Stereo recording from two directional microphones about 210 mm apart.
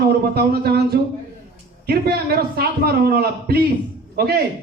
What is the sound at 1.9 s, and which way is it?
A man's voice, 50° right (ahead or behind).